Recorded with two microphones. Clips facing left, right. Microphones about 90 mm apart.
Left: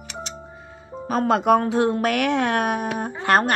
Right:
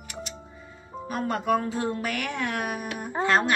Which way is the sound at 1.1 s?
90° left.